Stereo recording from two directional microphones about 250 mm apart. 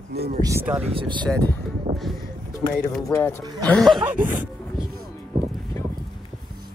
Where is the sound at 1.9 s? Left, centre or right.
Right.